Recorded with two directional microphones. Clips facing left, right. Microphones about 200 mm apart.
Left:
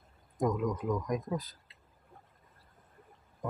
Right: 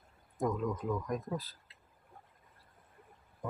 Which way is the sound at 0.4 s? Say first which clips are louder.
Left 3 dB; 15° left (ahead or behind).